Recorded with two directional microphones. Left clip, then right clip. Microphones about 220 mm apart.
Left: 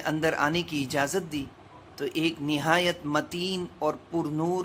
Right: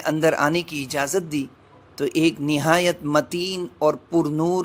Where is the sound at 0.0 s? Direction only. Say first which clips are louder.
Right 6 dB; 25° right (ahead or behind).